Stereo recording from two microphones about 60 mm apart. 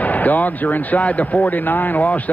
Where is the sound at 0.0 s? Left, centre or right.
Left.